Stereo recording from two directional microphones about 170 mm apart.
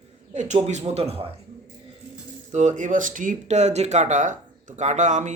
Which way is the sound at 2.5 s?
45° right (ahead or behind).